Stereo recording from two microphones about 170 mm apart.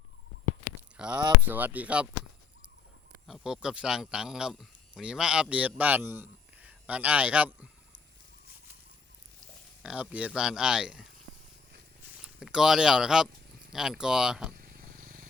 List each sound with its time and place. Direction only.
0.9 s speech: 5° right (ahead or behind)
3.2 s speech: centre (ahead or behind)
9.8 s speech: 5° right (ahead or behind)
12.1 s a sound: 5° right (ahead or behind)
13.7 s speech: 5° right (ahead or behind)
14.5 s wild animals: 55° right (ahead or behind)